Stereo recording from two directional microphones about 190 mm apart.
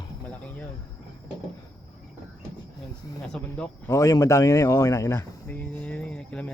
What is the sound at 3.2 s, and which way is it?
Speech, 5° left (ahead or behind).